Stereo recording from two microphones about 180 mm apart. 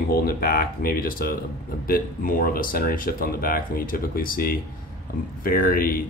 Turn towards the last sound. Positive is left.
turn(degrees=55)  # may be behind; listen again after turning